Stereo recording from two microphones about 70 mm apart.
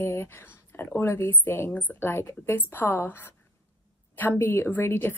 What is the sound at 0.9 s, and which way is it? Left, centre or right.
A woman's voice, left.